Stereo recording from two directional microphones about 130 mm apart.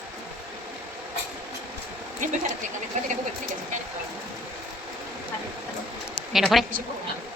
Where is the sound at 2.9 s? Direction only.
70° right (ahead or behind).